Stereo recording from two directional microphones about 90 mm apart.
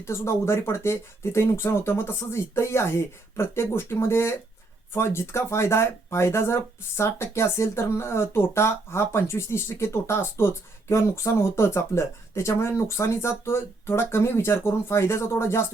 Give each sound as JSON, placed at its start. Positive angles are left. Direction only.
{"t": 0.0, "sound": "speech", "side_deg": 30}